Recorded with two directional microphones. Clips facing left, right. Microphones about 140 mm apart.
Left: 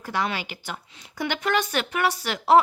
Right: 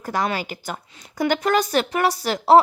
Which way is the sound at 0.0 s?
45° right (ahead or behind).